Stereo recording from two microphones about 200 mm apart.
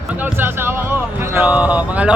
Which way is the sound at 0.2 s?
10° right (ahead or behind).